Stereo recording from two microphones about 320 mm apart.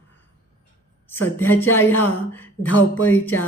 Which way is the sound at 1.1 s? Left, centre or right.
Centre.